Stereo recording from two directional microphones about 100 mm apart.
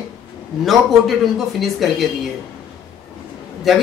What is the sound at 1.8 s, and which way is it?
Speech, centre (ahead or behind).